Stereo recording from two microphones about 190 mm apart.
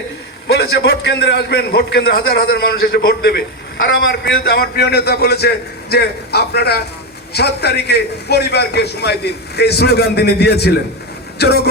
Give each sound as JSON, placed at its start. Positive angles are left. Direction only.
{"t": 0.4, "sound": "a man's voice", "side_deg": 60}